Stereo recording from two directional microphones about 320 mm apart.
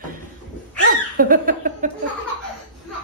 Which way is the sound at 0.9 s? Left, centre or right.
Right.